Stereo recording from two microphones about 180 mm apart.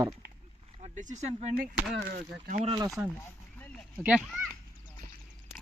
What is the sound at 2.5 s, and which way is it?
Speech, 40° right (ahead or behind).